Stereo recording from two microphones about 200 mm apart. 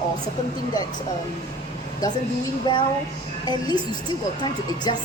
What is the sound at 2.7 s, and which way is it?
A woman's voice, 20° left (ahead or behind).